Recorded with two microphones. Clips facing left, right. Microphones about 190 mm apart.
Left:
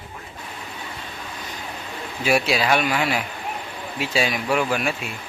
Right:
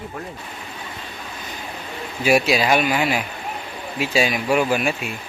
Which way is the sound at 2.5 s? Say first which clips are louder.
Right 2 dB; 5° right (ahead or behind).